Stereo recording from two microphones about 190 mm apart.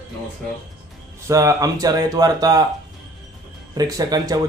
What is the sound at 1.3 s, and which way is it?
Speech, 15° right (ahead or behind).